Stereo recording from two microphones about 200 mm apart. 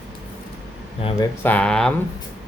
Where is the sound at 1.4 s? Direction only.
5° left (ahead or behind).